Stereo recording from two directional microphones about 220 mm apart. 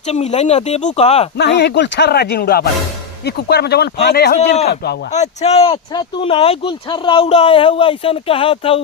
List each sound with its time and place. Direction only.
0.1 s speech: 30° left (ahead or behind)
1.4 s speech: 50° left (ahead or behind)
5.1 s speech: 30° left (ahead or behind)